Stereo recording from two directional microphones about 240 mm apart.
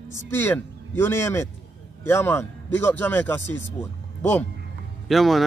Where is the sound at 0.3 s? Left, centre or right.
Centre.